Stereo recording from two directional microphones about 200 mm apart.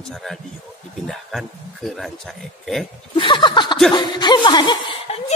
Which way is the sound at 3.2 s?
25° left (ahead or behind).